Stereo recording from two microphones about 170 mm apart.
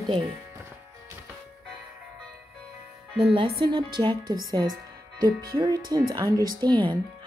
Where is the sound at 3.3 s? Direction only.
25° right (ahead or behind).